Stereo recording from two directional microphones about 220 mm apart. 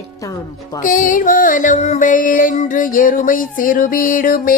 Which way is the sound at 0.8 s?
35° left (ahead or behind).